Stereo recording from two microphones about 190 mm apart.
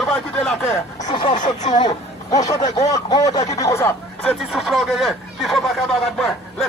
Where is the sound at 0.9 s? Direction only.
20° left (ahead or behind).